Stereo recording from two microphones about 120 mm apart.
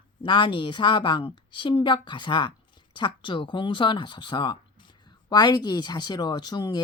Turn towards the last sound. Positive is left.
turn(degrees=35)  # may be behind; listen again after turning